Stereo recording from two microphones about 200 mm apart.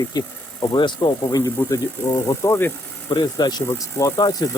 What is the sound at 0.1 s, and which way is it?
Speech, 20° left (ahead or behind).